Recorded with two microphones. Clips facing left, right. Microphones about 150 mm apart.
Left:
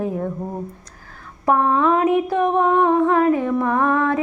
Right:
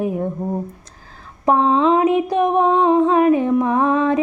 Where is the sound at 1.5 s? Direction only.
20° right (ahead or behind).